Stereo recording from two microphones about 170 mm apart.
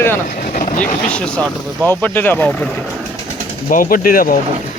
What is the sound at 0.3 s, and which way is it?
Speech, 50° left (ahead or behind).